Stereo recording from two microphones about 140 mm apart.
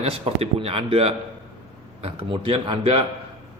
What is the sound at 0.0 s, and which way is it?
A man's voice, 45° right (ahead or behind).